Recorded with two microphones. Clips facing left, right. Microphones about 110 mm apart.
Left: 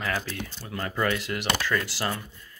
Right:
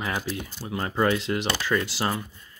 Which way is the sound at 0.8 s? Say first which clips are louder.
Right 3 dB; 25° right (ahead or behind).